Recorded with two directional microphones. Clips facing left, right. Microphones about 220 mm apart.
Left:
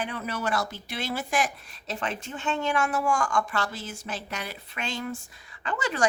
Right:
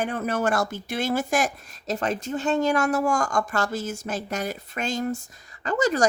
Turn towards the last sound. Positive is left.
turn(degrees=-40)  # may be behind; listen again after turning